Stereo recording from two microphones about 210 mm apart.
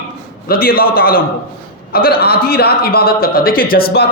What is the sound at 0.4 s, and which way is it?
A man's voice, 45° left (ahead or behind).